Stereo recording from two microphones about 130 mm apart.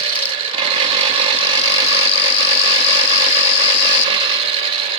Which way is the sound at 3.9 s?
40° right (ahead or behind).